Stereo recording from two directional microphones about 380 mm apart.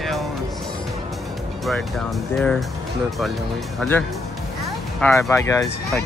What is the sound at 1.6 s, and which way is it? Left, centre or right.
Speech, centre.